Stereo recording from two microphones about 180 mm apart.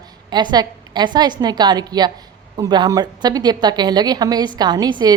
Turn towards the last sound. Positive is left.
turn(degrees=-25)  # may be behind; listen again after turning